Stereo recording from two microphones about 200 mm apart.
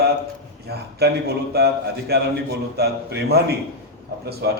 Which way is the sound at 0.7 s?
55° right (ahead or behind).